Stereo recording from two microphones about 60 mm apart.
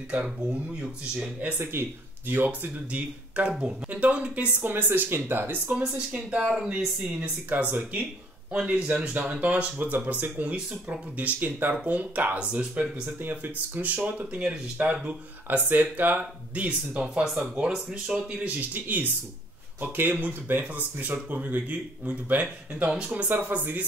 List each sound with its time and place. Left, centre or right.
0.1 s speech: centre
1.6 s speech: right
4.6 s speech: right
5.8 s speech: centre
11.1 s speech: right
15.4 s speech: right; by 18.2 s centre
18.4 s speech: right